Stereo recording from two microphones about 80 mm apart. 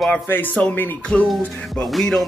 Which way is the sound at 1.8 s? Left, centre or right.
Centre.